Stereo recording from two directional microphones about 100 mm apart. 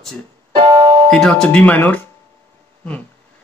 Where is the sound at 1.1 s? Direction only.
5° left (ahead or behind).